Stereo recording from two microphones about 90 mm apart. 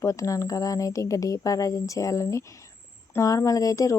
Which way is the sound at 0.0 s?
35° left (ahead or behind).